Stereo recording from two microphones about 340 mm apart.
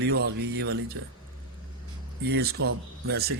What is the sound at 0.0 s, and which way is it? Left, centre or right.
Speech, right.